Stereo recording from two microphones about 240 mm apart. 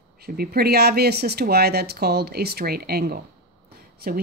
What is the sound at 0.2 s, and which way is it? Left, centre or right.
A woman's voice, right.